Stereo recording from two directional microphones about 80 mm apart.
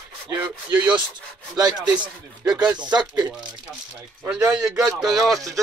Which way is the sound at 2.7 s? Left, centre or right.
Right.